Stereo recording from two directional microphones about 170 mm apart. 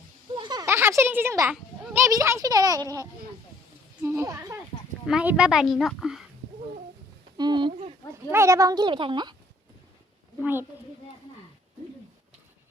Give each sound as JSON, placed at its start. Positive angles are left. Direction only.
{"t": 0.3, "sound": "a sound", "side_deg": -25}
{"t": 0.6, "sound": "speech", "side_deg": -15}
{"t": 5.0, "sound": "a woman's voice", "side_deg": -5}
{"t": 7.3, "sound": "a sound", "side_deg": -25}
{"t": 8.3, "sound": "speech", "side_deg": -15}
{"t": 10.4, "sound": "speech", "side_deg": -10}